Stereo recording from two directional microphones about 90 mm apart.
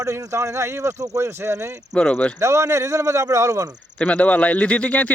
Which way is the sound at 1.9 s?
15° left (ahead or behind).